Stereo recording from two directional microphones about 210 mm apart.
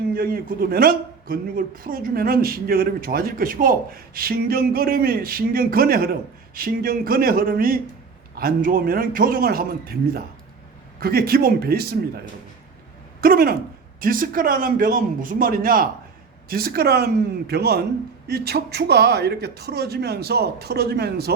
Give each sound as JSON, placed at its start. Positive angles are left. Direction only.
{"t": 0.1, "sound": "a man's voice", "side_deg": -45}
{"t": 11.0, "sound": "a man's voice", "side_deg": -45}
{"t": 13.2, "sound": "a man's voice", "side_deg": -45}